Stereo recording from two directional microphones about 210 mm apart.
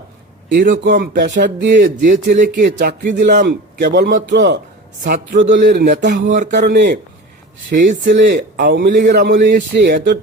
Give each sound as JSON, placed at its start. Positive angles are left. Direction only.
{"t": 0.4, "sound": "a man's voice", "side_deg": -50}
{"t": 7.7, "sound": "speech", "side_deg": -40}
{"t": 8.0, "sound": "a man's voice", "side_deg": -55}